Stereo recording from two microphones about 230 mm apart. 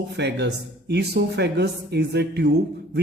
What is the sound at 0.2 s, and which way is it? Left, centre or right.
Speech, right.